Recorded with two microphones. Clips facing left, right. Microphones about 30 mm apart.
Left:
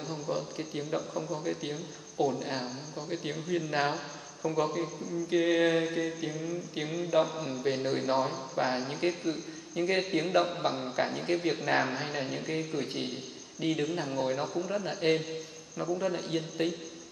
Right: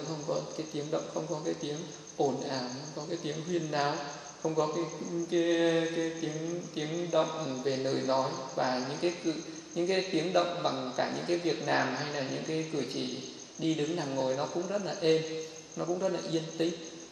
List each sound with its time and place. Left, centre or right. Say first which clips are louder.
0.1 s mantra: even; centre
4.4 s a man's voice: even; centre
4.6 s mantra: even; centre